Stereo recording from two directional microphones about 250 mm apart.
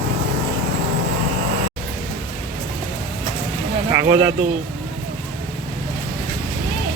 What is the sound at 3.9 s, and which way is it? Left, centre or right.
Speech, centre.